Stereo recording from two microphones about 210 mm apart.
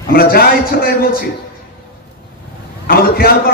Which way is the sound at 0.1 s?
45° left (ahead or behind).